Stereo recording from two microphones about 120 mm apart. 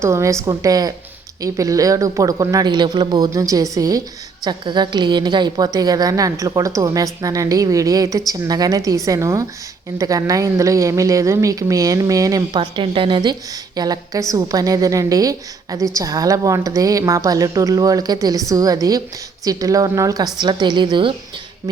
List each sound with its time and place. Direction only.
0.0 s a woman's voice: 25° right (ahead or behind)
12.7 s a woman's voice: 45° right (ahead or behind)